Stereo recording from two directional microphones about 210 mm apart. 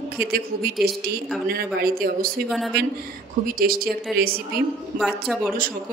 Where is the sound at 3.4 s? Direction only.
45° right (ahead or behind).